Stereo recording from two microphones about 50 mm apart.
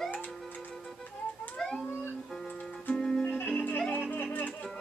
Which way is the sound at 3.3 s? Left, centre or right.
Left.